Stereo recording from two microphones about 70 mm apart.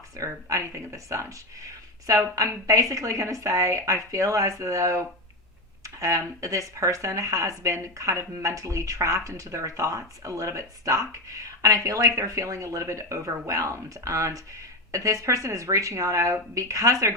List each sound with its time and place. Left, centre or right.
0.2 s speech: right